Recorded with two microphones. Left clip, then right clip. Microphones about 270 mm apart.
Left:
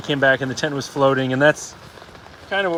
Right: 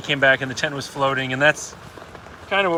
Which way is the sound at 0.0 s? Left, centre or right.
Centre.